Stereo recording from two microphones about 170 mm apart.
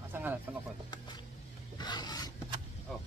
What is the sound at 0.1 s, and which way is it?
Music, 10° right (ahead or behind).